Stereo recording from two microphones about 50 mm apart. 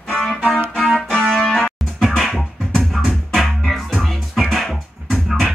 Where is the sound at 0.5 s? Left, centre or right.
Centre.